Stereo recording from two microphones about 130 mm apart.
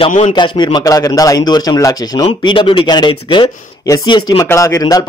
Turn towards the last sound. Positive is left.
turn(degrees=30)  # may be behind; listen again after turning